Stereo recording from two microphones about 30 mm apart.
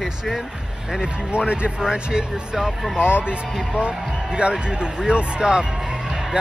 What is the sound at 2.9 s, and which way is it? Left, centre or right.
Speech, right.